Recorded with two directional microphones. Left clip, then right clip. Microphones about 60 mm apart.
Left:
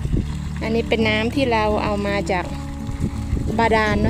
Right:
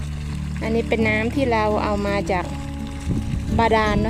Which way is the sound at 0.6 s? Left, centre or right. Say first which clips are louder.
Left 1 dB; centre.